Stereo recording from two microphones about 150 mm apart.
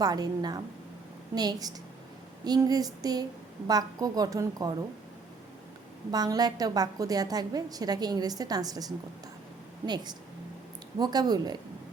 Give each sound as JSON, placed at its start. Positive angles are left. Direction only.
{"t": 0.0, "sound": "a woman's voice", "side_deg": -25}
{"t": 6.1, "sound": "a woman's voice", "side_deg": -25}